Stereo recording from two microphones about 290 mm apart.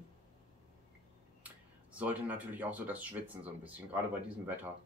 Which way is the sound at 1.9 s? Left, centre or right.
Centre.